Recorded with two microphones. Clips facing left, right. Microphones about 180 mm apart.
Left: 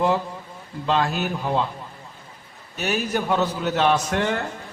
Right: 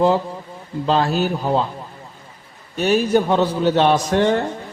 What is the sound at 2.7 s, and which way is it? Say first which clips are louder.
A man's voice: right 8 dB; 30° right (ahead or behind).